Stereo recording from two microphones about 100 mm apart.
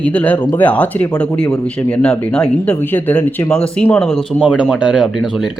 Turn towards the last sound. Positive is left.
turn(degrees=-5)  # may be behind; listen again after turning